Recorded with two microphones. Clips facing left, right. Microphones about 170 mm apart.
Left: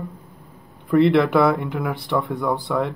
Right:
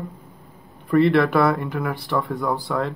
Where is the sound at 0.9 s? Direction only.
20° left (ahead or behind).